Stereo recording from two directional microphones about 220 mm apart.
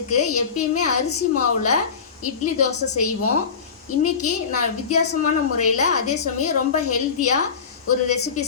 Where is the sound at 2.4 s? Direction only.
90° left.